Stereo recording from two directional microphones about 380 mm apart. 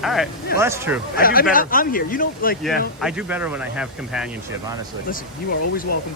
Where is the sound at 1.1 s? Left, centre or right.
Left.